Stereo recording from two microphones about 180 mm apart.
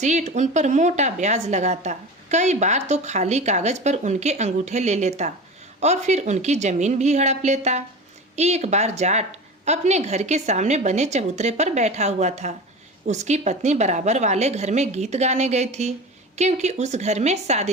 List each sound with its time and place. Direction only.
0.0 s a woman's voice: 40° right (ahead or behind)